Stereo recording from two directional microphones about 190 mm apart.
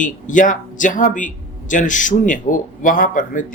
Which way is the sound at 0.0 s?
45° left (ahead or behind).